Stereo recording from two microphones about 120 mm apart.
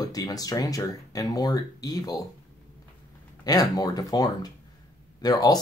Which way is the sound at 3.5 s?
30° left (ahead or behind).